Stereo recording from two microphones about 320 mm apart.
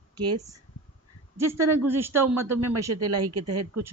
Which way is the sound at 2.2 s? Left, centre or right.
Right.